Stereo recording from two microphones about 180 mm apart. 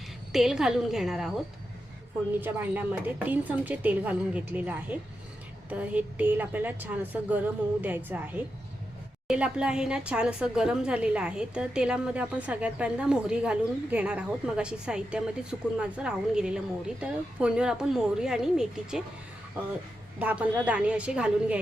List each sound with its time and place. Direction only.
0.3 s speech: centre (ahead or behind)
2.4 s a woman's voice: 10° right (ahead or behind)
20.1 s a woman's voice: 10° right (ahead or behind)